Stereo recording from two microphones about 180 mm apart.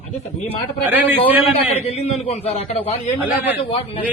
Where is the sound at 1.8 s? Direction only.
35° left (ahead or behind).